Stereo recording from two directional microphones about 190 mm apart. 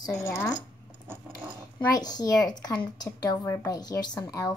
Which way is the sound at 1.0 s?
15° right (ahead or behind).